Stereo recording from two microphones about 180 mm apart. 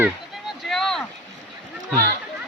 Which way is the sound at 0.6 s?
Centre (ahead or behind).